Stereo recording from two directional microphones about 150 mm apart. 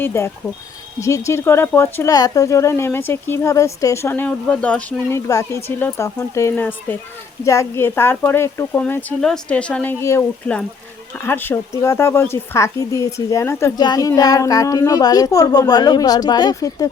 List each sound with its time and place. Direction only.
0.0 s speech: 15° left (ahead or behind)
5.1 s a woman's voice: 20° left (ahead or behind)
10.0 s a woman's voice: 20° left (ahead or behind)
10.4 s a woman's voice: 10° left (ahead or behind)